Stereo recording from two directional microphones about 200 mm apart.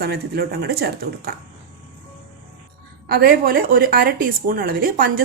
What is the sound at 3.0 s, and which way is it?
A woman's voice, 50° right (ahead or behind).